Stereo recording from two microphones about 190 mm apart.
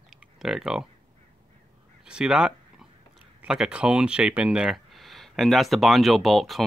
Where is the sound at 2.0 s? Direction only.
5° right (ahead or behind).